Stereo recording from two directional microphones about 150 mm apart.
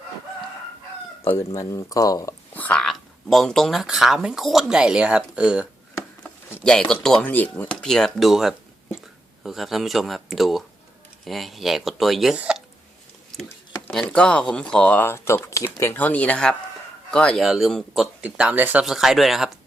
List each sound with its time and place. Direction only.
1.5 s speech: 20° left (ahead or behind)
2.5 s speech: 10° left (ahead or behind); by 5.6 s 5° right (ahead or behind)
6.2 s speech: 5° left (ahead or behind)
13.3 s a sound: centre (ahead or behind)
13.9 s speech: 5° left (ahead or behind)